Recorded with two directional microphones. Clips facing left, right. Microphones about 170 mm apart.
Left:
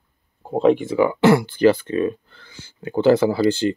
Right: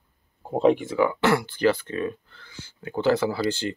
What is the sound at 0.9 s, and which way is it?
Speech, 15° left (ahead or behind).